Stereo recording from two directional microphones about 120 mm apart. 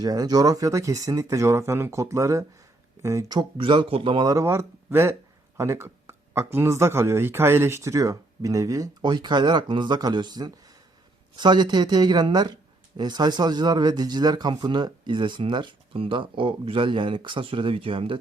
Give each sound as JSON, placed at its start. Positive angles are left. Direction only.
{"t": 0.0, "sound": "speech", "side_deg": -35}
{"t": 3.2, "sound": "speech", "side_deg": -40}
{"t": 4.3, "sound": "speech", "side_deg": -25}